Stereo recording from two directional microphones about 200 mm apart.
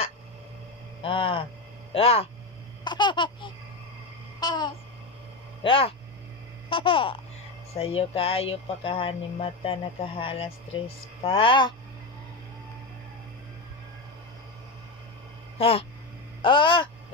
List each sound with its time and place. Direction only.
1.0 s speech: 25° left (ahead or behind)
4.4 s babbling: 20° left (ahead or behind)
5.6 s speech: 25° left (ahead or behind)
15.5 s a sound: 30° left (ahead or behind)
16.4 s speech: 25° left (ahead or behind)